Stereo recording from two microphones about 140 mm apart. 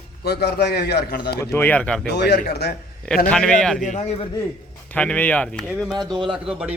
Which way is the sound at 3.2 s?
5° left (ahead or behind).